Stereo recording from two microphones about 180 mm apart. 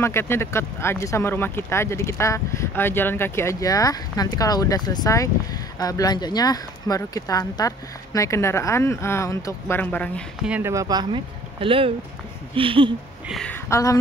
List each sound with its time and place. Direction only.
0.0 s speech: 15° left (ahead or behind)
10.4 s speech: 5° right (ahead or behind)
10.7 s speech: 20° right (ahead or behind)
13.3 s a woman's voice: 5° left (ahead or behind)
13.7 s speech: 15° left (ahead or behind)